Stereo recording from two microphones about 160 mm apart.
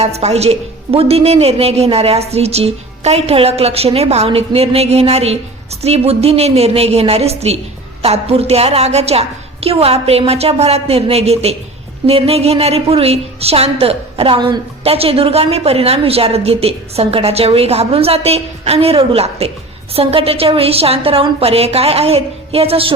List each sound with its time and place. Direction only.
0.0 s a woman's voice: 40° right (ahead or behind)